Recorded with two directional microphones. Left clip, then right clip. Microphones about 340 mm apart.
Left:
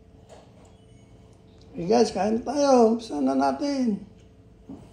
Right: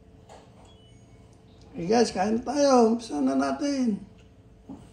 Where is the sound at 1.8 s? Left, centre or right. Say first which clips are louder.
Left 2 dB; centre.